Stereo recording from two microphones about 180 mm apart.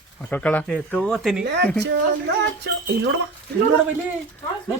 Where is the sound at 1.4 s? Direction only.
75° right (ahead or behind).